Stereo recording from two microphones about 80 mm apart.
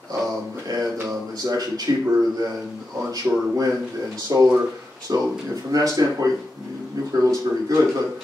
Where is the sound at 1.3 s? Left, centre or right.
Right.